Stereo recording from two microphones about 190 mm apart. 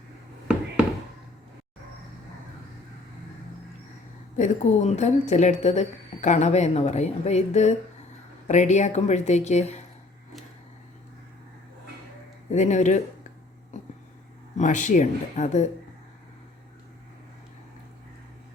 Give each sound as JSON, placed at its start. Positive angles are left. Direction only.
{"t": 4.4, "sound": "speech", "side_deg": 40}
{"t": 12.5, "sound": "speech", "side_deg": 40}
{"t": 14.6, "sound": "speech", "side_deg": 40}